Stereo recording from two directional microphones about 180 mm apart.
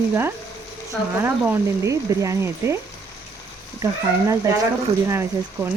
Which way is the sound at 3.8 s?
15° right (ahead or behind).